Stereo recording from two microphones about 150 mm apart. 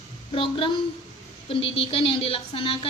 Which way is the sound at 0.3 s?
35° left (ahead or behind).